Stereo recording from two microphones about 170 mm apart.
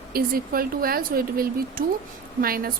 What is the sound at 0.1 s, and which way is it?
A woman's voice, 60° right (ahead or behind).